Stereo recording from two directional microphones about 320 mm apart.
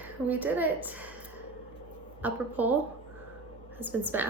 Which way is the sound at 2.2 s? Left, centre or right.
Centre.